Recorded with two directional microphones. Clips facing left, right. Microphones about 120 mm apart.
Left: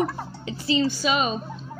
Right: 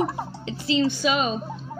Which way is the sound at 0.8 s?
Centre (ahead or behind).